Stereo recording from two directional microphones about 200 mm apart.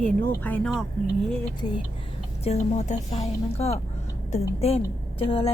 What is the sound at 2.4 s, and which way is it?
A woman's voice, 35° left (ahead or behind).